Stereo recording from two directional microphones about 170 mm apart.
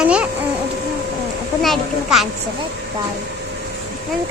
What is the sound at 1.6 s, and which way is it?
Speech, centre (ahead or behind).